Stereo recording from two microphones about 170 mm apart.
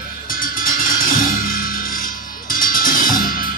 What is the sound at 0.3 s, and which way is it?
Music, 55° left (ahead or behind).